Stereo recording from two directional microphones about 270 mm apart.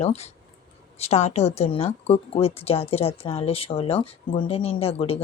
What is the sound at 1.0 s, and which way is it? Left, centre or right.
Speech, left.